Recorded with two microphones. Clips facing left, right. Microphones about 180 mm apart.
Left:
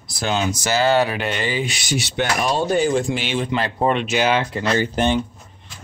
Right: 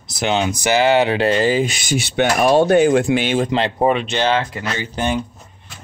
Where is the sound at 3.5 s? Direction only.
25° right (ahead or behind).